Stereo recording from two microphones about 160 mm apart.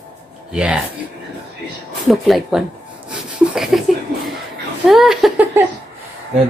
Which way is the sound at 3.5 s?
Centre (ahead or behind).